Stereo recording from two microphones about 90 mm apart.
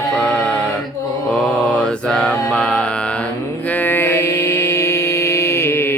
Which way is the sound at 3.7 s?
20° left (ahead or behind).